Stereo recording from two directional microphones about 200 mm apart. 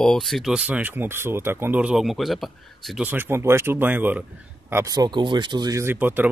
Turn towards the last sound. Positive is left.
turn(degrees=-10)  # may be behind; listen again after turning